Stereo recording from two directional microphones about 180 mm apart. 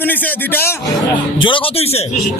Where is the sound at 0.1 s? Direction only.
10° left (ahead or behind).